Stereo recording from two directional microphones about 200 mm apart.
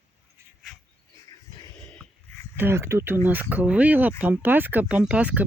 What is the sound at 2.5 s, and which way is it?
Speech, 10° right (ahead or behind).